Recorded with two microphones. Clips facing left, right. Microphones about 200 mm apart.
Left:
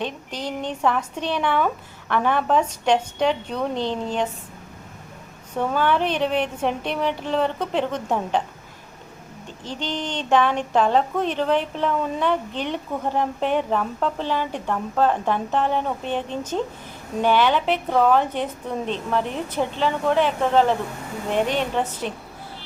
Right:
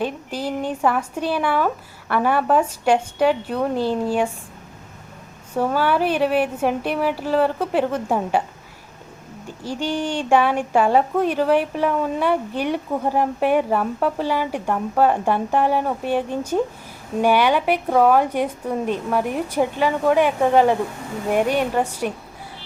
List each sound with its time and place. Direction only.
0.0 s speech: 5° right (ahead or behind)
5.5 s speech: 5° right (ahead or behind)
9.5 s speech: 10° right (ahead or behind)